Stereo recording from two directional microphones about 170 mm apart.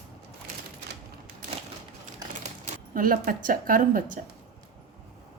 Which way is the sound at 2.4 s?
50° right (ahead or behind).